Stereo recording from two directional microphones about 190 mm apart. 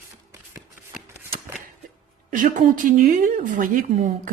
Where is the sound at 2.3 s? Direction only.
45° right (ahead or behind).